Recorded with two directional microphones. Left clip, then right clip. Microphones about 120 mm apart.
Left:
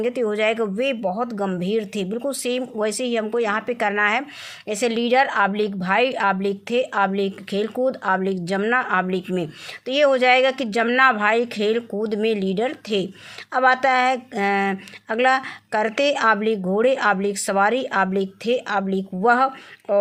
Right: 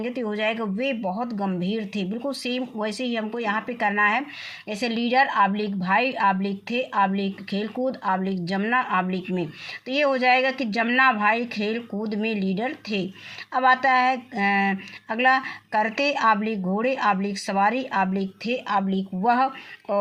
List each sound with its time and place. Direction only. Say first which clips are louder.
0.0 s speech: left 6 dB; 50° left (ahead or behind)